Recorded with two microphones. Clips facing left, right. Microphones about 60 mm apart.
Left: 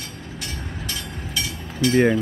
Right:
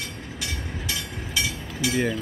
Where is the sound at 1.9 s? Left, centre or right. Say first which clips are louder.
Left 8 dB; left.